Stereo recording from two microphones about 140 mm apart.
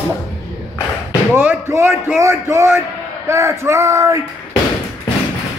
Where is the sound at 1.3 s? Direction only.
10° right (ahead or behind).